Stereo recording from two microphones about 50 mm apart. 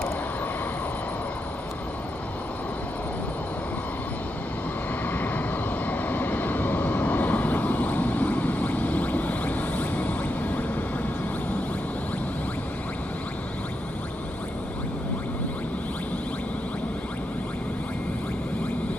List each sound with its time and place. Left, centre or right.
5.0 s vehicle: left